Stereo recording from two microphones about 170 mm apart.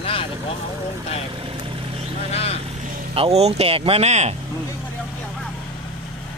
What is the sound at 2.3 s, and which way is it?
Speech, 35° left (ahead or behind).